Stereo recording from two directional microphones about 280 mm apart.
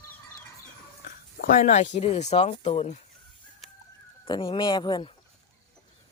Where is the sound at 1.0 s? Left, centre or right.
Left.